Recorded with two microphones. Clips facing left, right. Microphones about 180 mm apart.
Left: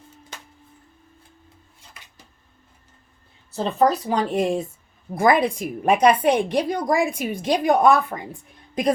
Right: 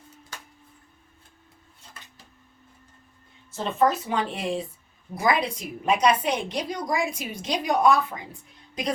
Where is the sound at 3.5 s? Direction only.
35° left (ahead or behind).